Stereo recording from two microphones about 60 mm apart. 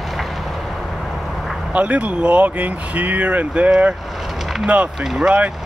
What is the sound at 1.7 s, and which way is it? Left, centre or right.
Speech, right.